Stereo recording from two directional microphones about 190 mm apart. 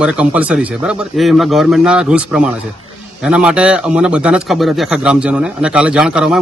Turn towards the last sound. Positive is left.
turn(degrees=-5)  # may be behind; listen again after turning